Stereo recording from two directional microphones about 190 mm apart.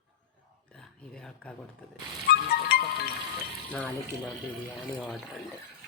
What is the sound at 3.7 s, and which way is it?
Speech, 5° left (ahead or behind).